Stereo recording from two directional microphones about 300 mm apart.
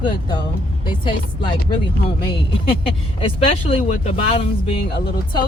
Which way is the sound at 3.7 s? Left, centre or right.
Left.